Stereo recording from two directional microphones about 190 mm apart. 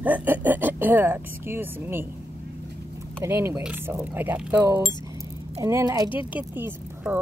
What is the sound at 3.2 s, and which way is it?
Speech, 15° right (ahead or behind).